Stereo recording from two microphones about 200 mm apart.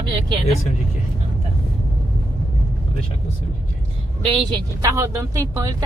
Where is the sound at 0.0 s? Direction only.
25° right (ahead or behind).